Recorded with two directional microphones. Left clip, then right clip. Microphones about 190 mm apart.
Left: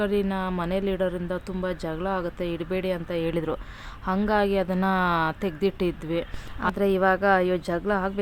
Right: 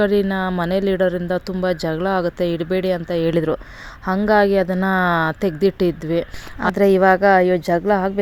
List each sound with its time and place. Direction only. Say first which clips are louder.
0.0 s speech: right 8 dB; 30° right (ahead or behind)